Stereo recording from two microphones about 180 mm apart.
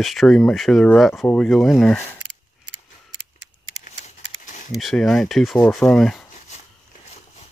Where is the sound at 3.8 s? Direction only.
45° left (ahead or behind).